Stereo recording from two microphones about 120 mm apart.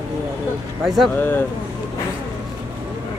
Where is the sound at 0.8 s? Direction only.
Centre (ahead or behind).